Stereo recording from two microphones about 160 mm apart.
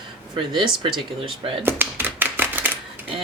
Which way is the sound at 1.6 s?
15° right (ahead or behind).